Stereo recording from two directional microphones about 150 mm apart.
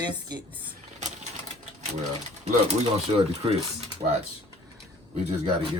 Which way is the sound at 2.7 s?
45° right (ahead or behind).